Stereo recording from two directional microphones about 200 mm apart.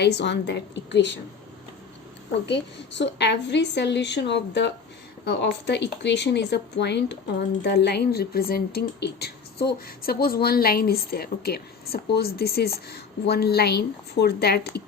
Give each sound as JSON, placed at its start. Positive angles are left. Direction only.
{"t": 0.0, "sound": "a woman's voice", "side_deg": 60}
{"t": 2.5, "sound": "a woman's voice", "side_deg": 60}